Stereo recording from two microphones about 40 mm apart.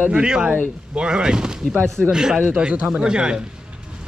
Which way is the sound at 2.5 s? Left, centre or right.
Right.